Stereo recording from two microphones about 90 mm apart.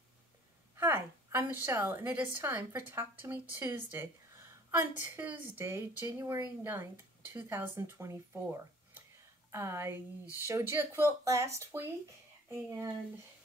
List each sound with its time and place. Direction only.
0.7 s a woman's voice: 25° right (ahead or behind)
9.5 s a woman's voice: 30° right (ahead or behind)